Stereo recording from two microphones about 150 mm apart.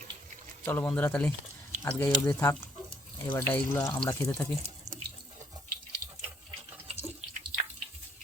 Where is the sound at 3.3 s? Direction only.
15° left (ahead or behind).